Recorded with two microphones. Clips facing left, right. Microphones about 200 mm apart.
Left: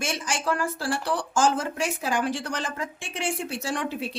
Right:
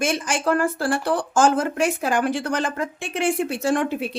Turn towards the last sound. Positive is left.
turn(degrees=-55)  # may be behind; listen again after turning